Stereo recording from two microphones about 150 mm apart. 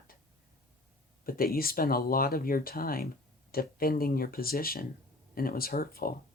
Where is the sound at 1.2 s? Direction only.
75° left (ahead or behind).